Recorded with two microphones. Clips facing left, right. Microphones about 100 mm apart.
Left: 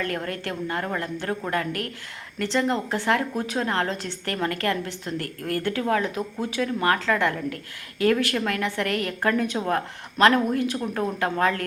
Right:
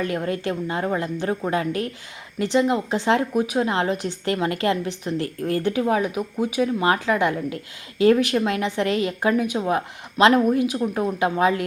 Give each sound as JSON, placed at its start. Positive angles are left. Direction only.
{"t": 0.1, "sound": "a woman's voice", "side_deg": -15}